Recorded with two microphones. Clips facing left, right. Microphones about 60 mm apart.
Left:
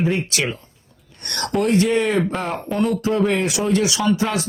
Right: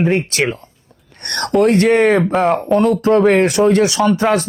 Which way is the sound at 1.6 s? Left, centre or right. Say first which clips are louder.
Right 6 dB; right.